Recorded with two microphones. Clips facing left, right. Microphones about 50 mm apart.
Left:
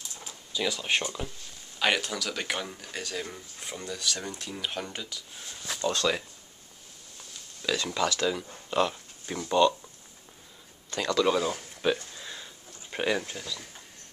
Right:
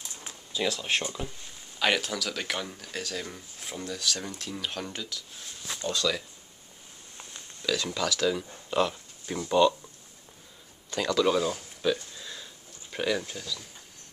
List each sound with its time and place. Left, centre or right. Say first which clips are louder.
0.7 s speech: left 1 dB; centre
5.8 s speech: left 3 dB; left
7.8 s speech: left 1 dB; centre
10.9 s speech: even; centre
11.8 s a sound: even; left
12.9 s speech: left 1 dB; left